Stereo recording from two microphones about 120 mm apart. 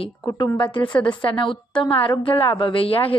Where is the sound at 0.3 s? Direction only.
40° left (ahead or behind).